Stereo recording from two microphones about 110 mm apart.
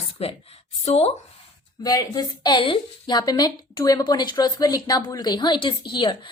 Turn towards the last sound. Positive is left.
turn(degrees=45)  # may be behind; listen again after turning